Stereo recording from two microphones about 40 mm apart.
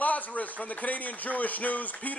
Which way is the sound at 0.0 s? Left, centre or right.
Left.